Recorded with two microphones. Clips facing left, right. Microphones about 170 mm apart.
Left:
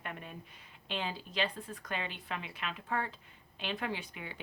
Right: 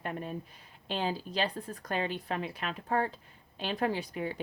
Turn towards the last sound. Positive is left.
turn(degrees=-40)  # may be behind; listen again after turning